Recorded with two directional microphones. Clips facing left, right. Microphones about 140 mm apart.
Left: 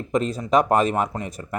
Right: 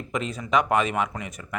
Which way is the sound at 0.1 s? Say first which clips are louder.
Left 5 dB; 35° left (ahead or behind).